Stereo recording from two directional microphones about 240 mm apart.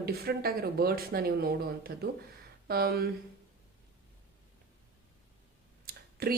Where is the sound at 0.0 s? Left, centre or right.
Right.